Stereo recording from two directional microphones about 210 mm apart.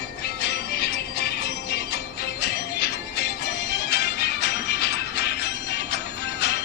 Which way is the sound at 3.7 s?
50° left (ahead or behind).